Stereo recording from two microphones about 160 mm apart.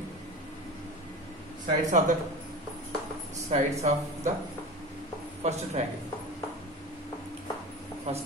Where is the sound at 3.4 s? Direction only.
45° right (ahead or behind).